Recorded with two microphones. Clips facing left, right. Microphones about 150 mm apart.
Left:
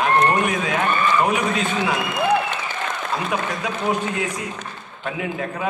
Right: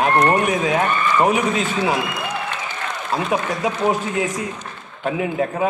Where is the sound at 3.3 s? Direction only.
30° right (ahead or behind).